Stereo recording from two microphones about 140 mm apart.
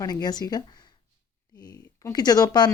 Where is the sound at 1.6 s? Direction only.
25° left (ahead or behind).